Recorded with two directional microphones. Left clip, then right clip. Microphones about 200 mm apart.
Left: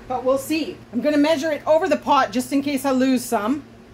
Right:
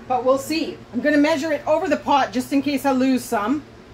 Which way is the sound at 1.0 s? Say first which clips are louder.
Even; 40° left (ahead or behind).